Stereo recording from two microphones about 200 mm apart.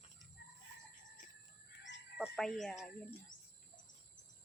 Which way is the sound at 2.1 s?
Centre (ahead or behind).